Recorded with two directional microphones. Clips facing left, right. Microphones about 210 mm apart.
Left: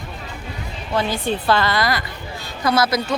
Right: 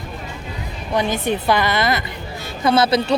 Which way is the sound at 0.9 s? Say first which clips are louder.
Right 2 dB; 20° right (ahead or behind).